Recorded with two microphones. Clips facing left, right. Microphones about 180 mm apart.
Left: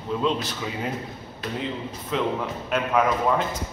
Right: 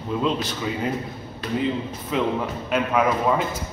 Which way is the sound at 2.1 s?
5° right (ahead or behind).